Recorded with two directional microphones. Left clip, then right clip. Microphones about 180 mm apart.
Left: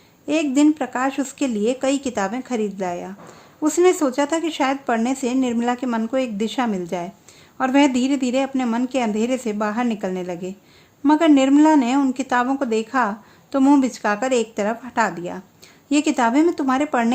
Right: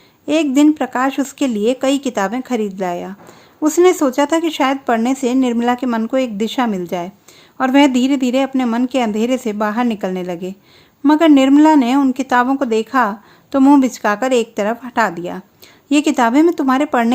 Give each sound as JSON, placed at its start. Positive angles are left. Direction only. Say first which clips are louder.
{"t": 0.3, "sound": "a woman's voice", "louder": "right 5 dB", "side_deg": -30}